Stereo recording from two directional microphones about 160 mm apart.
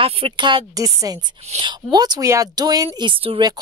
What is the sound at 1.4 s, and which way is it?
Speech, 35° right (ahead or behind).